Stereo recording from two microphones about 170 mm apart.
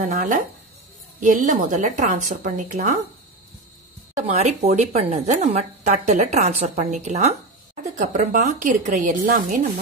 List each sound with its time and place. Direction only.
0.0 s a woman's voice: 45° right (ahead or behind)
4.3 s a woman's voice: 40° right (ahead or behind)